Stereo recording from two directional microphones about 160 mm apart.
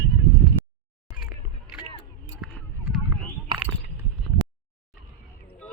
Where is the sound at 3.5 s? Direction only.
30° right (ahead or behind).